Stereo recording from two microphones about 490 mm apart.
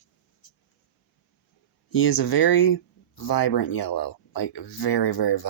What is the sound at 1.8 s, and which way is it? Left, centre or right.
Speech, left.